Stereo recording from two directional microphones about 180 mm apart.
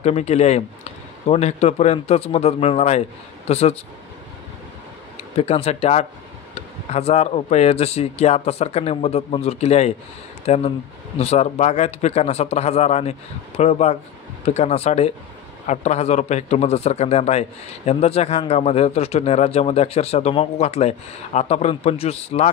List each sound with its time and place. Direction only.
0.0 s a man's voice: 35° left (ahead or behind)
5.4 s a man's voice: 35° left (ahead or behind)